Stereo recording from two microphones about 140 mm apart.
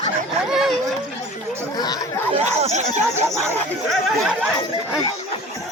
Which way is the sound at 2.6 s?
55° right (ahead or behind).